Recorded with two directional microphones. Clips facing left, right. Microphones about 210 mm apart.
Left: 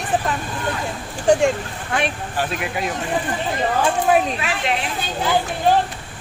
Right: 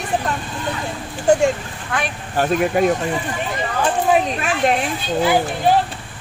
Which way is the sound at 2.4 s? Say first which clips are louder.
Right 9 dB; 50° right (ahead or behind).